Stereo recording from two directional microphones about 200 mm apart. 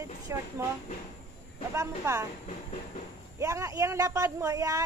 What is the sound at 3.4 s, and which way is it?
Speech, 15° right (ahead or behind).